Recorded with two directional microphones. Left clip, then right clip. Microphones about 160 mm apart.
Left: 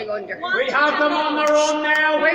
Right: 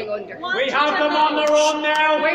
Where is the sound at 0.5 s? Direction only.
55° left (ahead or behind).